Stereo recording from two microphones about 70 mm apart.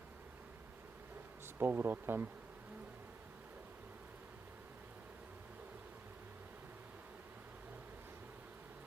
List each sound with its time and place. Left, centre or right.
1.5 s speech: right